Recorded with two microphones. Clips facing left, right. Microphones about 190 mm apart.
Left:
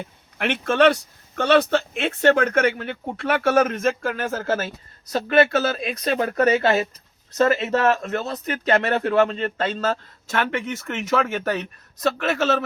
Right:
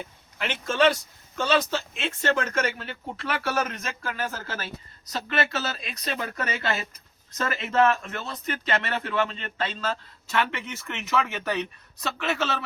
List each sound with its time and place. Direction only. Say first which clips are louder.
0.3 s speech: left 5 dB; 60° left (ahead or behind)
7.3 s speech: left 5 dB; 40° left (ahead or behind)